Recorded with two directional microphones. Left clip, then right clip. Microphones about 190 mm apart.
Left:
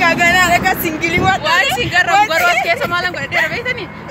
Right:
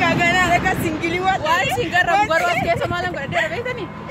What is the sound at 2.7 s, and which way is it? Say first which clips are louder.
Speech: left 5 dB; 20° right (ahead or behind).